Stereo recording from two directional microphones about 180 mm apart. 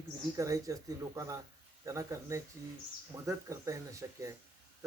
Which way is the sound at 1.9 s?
15° right (ahead or behind).